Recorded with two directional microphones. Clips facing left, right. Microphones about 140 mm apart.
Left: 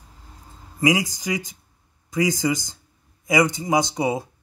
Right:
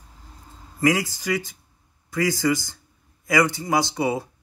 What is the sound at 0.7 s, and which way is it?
A man's voice, 15° left (ahead or behind).